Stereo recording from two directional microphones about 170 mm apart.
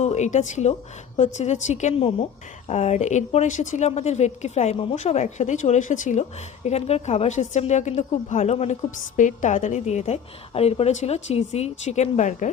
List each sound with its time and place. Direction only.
0.0 s a woman's voice: 40° left (ahead or behind)